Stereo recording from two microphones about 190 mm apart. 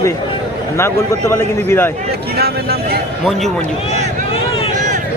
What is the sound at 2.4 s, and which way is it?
Speech, 55° right (ahead or behind).